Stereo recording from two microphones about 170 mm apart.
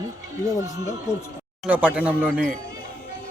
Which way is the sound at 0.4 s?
20° right (ahead or behind).